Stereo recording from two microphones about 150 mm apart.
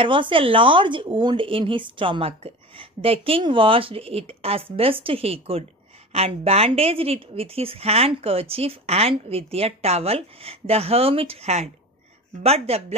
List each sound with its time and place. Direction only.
0.0 s speech: 35° right (ahead or behind)